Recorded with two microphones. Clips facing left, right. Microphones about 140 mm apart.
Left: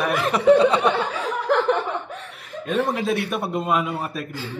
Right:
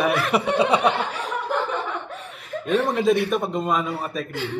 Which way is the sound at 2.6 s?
Centre (ahead or behind).